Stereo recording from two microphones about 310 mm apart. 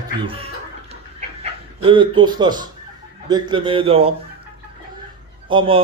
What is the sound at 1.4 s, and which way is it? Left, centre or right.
Dog, centre.